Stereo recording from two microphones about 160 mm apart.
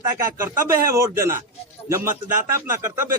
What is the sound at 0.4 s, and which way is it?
Speech, 20° right (ahead or behind).